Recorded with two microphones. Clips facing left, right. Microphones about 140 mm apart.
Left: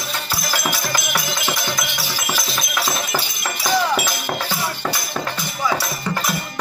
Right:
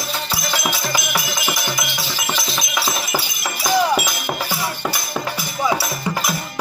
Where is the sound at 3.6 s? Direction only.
10° right (ahead or behind).